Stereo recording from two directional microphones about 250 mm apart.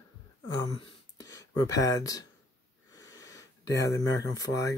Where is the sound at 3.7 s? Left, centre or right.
Centre.